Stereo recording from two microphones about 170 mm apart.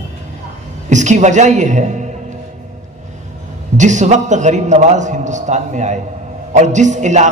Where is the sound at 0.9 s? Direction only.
45° right (ahead or behind).